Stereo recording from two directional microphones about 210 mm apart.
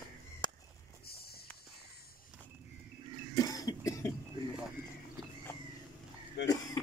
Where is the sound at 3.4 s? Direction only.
20° left (ahead or behind).